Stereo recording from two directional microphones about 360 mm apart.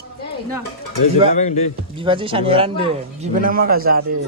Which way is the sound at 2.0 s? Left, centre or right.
Centre.